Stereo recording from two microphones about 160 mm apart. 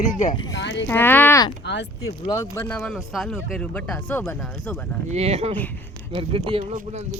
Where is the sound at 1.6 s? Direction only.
90° left.